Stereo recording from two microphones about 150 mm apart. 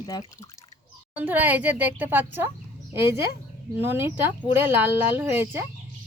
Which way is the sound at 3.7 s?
15° right (ahead or behind).